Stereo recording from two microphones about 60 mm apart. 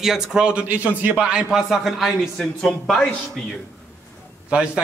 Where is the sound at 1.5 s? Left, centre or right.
Centre.